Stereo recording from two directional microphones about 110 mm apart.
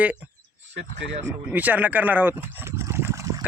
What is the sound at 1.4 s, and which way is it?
Speech, 15° right (ahead or behind).